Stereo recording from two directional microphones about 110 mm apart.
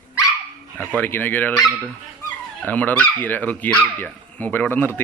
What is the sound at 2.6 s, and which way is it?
Speech, 15° left (ahead or behind).